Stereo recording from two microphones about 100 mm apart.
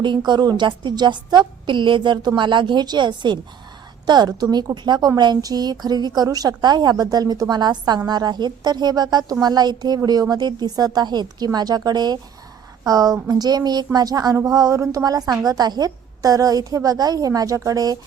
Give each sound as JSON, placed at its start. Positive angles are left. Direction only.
{"t": 0.3, "sound": "a woman's voice", "side_deg": -45}